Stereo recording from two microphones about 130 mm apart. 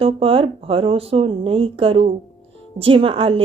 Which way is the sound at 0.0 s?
45° right (ahead or behind).